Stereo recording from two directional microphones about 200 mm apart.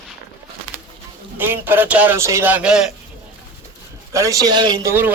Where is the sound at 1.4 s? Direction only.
10° right (ahead or behind).